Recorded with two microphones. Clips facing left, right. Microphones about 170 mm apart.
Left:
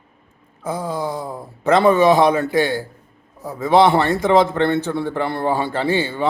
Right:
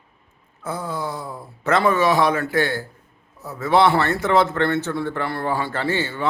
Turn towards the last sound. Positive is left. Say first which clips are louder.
# left 4 dB
turn(degrees=15)  # may be behind; listen again after turning